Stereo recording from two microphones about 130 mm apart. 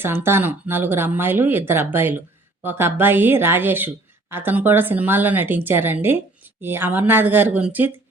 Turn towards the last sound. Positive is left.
turn(degrees=-10)  # may be behind; listen again after turning